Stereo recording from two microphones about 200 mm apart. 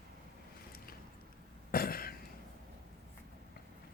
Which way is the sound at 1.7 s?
45° left (ahead or behind).